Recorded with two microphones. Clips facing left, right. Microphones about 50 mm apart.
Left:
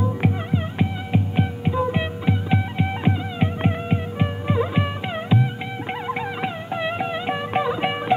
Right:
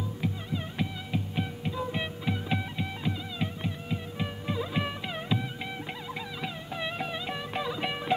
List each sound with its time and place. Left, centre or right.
0.5 s music: left
3.0 s music: left
6.0 s music: left